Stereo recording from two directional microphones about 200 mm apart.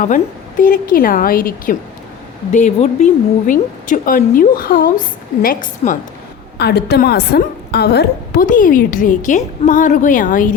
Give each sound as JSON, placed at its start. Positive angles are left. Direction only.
{"t": 0.6, "sound": "a woman's voice", "side_deg": 45}
{"t": 6.6, "sound": "a woman's voice", "side_deg": 55}